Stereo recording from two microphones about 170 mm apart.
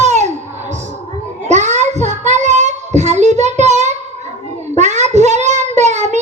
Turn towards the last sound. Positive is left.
turn(degrees=-40)  # may be behind; listen again after turning